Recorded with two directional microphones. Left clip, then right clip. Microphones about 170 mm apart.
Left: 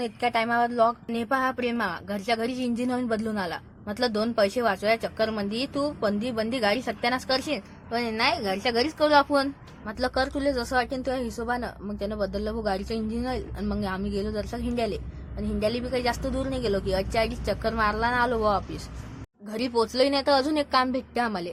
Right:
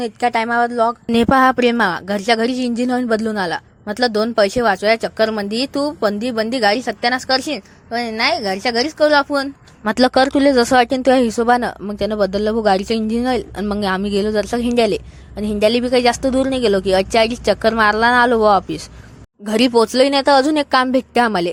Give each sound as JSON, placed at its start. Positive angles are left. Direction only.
{"t": 0.0, "sound": "a woman's voice", "side_deg": -35}
{"t": 1.1, "sound": "a woman's voice", "side_deg": -45}
{"t": 9.8, "sound": "speech", "side_deg": -55}